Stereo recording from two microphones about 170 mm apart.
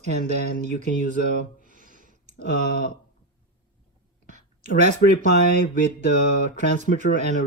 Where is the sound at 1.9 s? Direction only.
50° right (ahead or behind).